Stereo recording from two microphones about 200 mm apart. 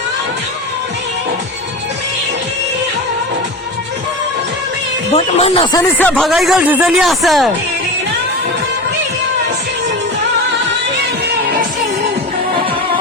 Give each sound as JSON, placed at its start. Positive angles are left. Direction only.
{"t": 5.1, "sound": "speech", "side_deg": 30}
{"t": 5.7, "sound": "speech", "side_deg": 10}